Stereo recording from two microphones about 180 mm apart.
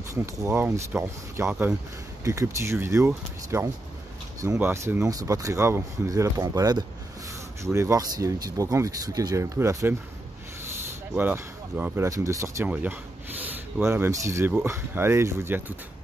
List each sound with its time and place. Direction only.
0.1 s speech: 15° right (ahead or behind)